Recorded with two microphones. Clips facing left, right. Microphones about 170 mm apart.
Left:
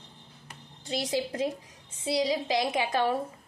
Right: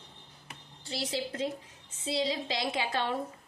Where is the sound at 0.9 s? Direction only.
15° left (ahead or behind).